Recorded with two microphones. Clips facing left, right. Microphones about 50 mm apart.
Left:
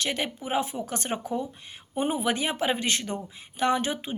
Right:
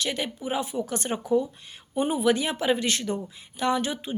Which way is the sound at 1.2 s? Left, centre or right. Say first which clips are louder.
Right 7 dB; left.